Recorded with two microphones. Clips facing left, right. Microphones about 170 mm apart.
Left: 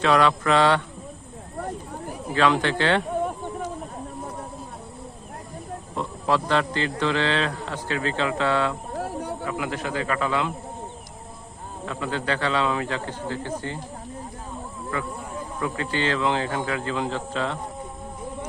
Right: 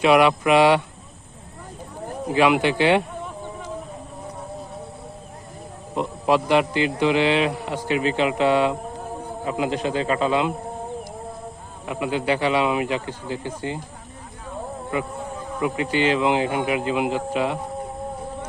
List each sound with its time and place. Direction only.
0.0 s a man's voice: 15° right (ahead or behind)
2.3 s a man's voice: 10° right (ahead or behind)
6.0 s a man's voice: 15° right (ahead or behind)
9.0 s a sound: 75° left (ahead or behind)
9.5 s a man's voice: 20° right (ahead or behind)
11.9 s a man's voice: 15° right (ahead or behind)
14.9 s a man's voice: 20° right (ahead or behind)